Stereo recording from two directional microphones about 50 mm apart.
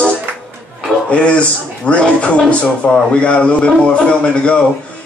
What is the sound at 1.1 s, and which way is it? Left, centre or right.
A man's voice, left.